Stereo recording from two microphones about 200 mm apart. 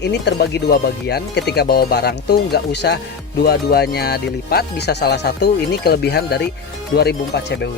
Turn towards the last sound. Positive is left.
turn(degrees=55)  # may be behind; listen again after turning